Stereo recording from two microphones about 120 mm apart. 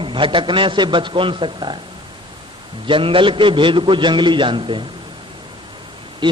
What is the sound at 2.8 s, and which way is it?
A man's voice, 45° right (ahead or behind).